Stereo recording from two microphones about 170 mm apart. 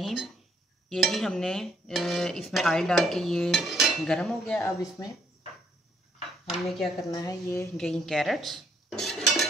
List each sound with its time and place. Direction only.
0.0 s speech: 5° right (ahead or behind)
0.8 s dishes: centre (ahead or behind)
4.6 s speech: 15° left (ahead or behind)
6.7 s dishes: centre (ahead or behind)
7.1 s a woman's voice: 20° left (ahead or behind)
7.7 s speech: 5° left (ahead or behind)